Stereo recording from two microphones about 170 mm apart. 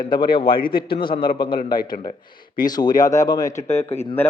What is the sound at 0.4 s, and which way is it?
Speech, 60° left (ahead or behind).